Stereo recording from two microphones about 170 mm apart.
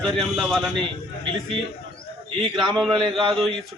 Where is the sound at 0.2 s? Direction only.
Centre (ahead or behind).